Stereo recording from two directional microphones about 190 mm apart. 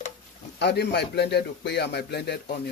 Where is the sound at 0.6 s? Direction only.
60° left (ahead or behind).